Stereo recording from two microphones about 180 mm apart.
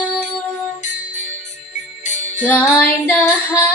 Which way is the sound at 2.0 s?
40° left (ahead or behind).